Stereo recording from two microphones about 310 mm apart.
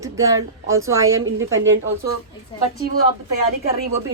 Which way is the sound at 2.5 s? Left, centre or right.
Centre.